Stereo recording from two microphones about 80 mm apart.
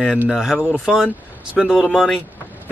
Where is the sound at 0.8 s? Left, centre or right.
Centre.